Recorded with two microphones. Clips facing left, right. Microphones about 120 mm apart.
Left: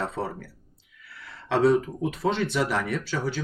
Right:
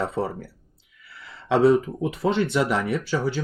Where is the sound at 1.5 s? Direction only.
15° right (ahead or behind).